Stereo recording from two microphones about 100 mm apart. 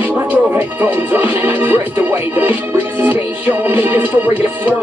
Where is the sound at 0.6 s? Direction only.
20° right (ahead or behind).